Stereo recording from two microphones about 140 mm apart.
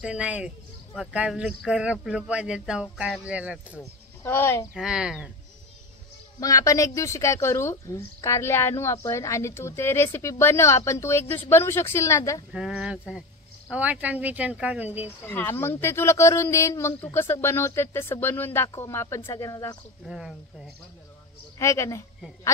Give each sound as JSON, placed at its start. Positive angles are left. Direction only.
{"t": 0.0, "sound": "speech", "side_deg": -10}
{"t": 4.2, "sound": "speech", "side_deg": 15}
{"t": 4.7, "sound": "speech", "side_deg": -5}
{"t": 6.4, "sound": "speech", "side_deg": 25}
{"t": 12.5, "sound": "speech", "side_deg": -5}
{"t": 15.2, "sound": "speech", "side_deg": 15}
{"t": 20.1, "sound": "speech", "side_deg": -5}
{"t": 21.5, "sound": "speech", "side_deg": 20}